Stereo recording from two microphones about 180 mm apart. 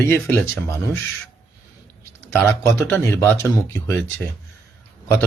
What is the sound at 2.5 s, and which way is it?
Speech, 15° left (ahead or behind).